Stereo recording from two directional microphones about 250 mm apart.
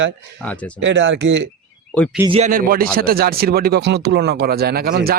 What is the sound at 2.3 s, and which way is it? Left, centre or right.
Speech, right.